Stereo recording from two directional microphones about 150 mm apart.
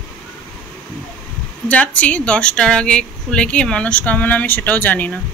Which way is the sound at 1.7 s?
10° left (ahead or behind).